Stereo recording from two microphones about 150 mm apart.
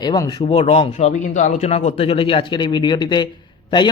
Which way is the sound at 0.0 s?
30° left (ahead or behind).